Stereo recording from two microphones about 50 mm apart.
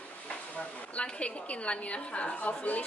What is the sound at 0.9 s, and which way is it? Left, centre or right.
Speech, left.